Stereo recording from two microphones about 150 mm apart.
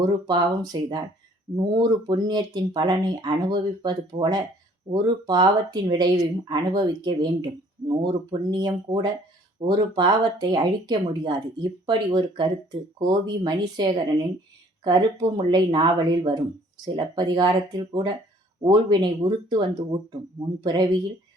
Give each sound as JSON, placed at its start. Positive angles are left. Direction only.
{"t": 0.0, "sound": "speech", "side_deg": -30}